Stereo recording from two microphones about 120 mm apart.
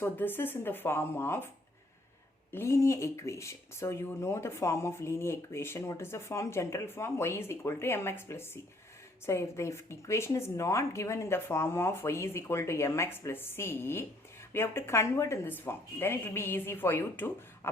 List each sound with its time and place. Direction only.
0.0 s speech: 15° left (ahead or behind)
2.5 s speech: 20° left (ahead or behind)